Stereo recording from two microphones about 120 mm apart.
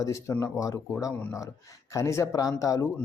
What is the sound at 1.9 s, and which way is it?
Speech, 25° left (ahead or behind).